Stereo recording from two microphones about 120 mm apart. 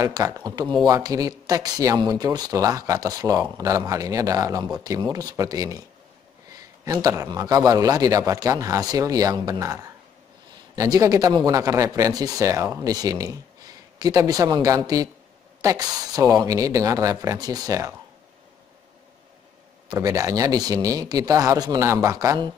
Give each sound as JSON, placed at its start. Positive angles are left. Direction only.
{"t": 0.0, "sound": "speech", "side_deg": -25}
{"t": 19.9, "sound": "speech", "side_deg": -25}